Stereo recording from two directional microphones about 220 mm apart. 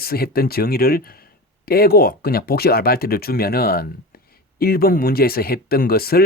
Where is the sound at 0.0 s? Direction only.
45° left (ahead or behind).